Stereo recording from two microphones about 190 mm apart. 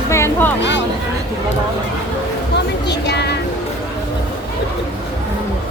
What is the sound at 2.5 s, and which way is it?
Music, 65° left (ahead or behind).